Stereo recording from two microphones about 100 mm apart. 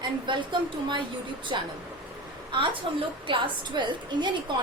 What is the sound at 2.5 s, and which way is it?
A woman's voice, 60° right (ahead or behind).